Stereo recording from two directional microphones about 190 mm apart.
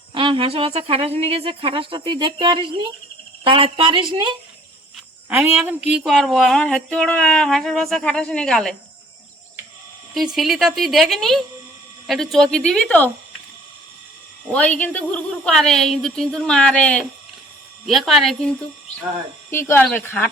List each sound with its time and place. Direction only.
0.1 s a woman's voice: 25° right (ahead or behind)
5.3 s speech: 10° right (ahead or behind)
10.2 s speech: centre (ahead or behind)
14.5 s speech: 5° left (ahead or behind)
19.5 s speech: 10° left (ahead or behind)